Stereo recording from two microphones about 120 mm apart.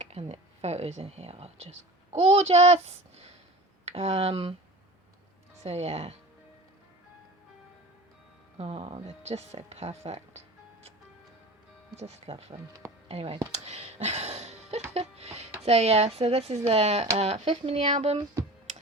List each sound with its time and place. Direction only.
0.0 s speech: 60° right (ahead or behind)
5.6 s speech: 65° right (ahead or behind)
8.5 s speech: 55° right (ahead or behind)
11.9 s speech: 65° right (ahead or behind); by 13.5 s 50° right (ahead or behind)
13.5 s a sound: 65° right (ahead or behind)
14.9 s music: 60° right (ahead or behind)
15.6 s speech: 60° right (ahead or behind)